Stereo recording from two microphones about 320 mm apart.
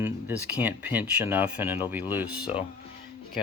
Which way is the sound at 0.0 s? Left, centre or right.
Centre.